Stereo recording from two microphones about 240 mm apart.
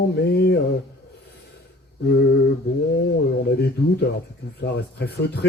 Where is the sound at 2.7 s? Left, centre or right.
Left.